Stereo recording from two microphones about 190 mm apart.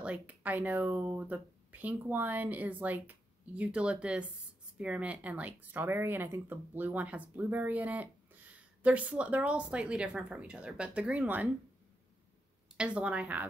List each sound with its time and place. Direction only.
0.0 s speech: 5° right (ahead or behind)
12.7 s speech: 5° right (ahead or behind)